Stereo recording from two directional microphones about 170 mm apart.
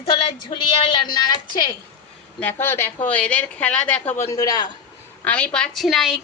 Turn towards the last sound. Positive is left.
turn(degrees=0)  # may be behind; listen again after turning